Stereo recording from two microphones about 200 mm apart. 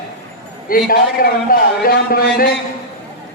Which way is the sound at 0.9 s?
45° left (ahead or behind).